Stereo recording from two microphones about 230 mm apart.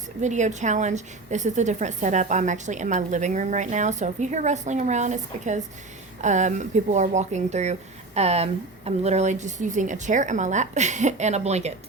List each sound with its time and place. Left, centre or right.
0.2 s speech: right